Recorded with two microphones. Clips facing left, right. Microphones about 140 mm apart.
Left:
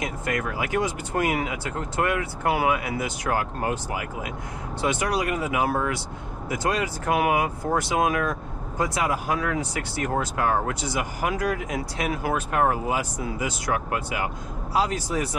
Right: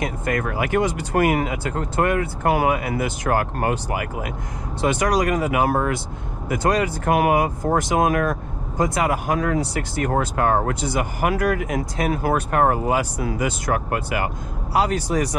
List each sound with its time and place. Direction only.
0.0 s speech: 50° right (ahead or behind)
1.4 s speech: 40° right (ahead or behind); by 4.3 s 60° right (ahead or behind)
4.8 s speech: 75° right (ahead or behind); by 5.9 s 45° right (ahead or behind)
6.5 s speech: 60° right (ahead or behind)
9.4 s speech: 40° right (ahead or behind)
9.9 s speech: 50° right (ahead or behind)
13.2 s speech: 70° right (ahead or behind)
13.7 s speech: 45° right (ahead or behind); by 15.1 s 65° right (ahead or behind)